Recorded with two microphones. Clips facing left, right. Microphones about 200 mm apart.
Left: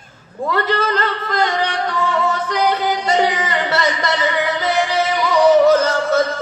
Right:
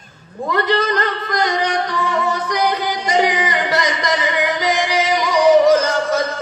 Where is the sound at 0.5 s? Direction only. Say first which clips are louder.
Right 2 dB; 15° right (ahead or behind).